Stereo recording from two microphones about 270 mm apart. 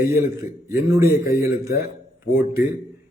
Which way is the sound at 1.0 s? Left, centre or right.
Left.